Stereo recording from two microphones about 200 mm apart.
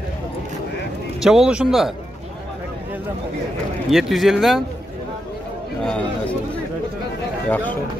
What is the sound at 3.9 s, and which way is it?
Speech, centre (ahead or behind).